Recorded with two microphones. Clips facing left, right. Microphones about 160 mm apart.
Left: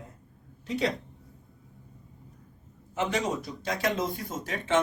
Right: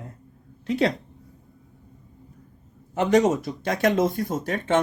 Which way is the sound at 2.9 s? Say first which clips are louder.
Right 10 dB; 50° right (ahead or behind).